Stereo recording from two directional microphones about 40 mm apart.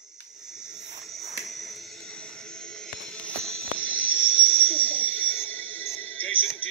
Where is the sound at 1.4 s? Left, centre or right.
Centre.